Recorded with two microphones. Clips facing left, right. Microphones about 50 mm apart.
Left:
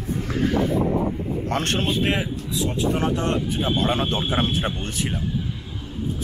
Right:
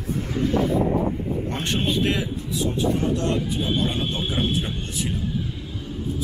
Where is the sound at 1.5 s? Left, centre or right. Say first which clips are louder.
Left 6 dB; left.